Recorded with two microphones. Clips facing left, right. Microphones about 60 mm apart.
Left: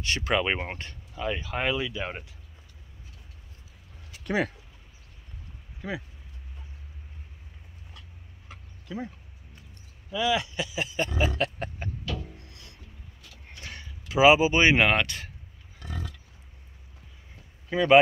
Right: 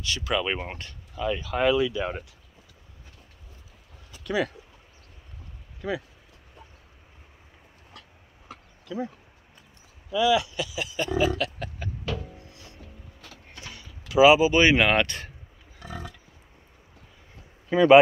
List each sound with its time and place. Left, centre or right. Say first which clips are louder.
0.0 s speech: left 1 dB; left
0.4 s speech: left 1 dB; left
1.1 s speech: right 3 dB; centre
4.2 s a sound: right 1 dB; left
5.8 s speech: right 4 dB; left
10.1 s speech: right 4 dB; left
11.1 s a sound: right 5 dB; left
12.4 s music: right 3 dB; left
12.7 s music: right 4 dB; centre
14.0 s speech: right 2 dB; left
14.9 s speech: right 2 dB; centre
15.8 s livestock: right 1 dB; centre
17.6 s speech: right 6 dB; centre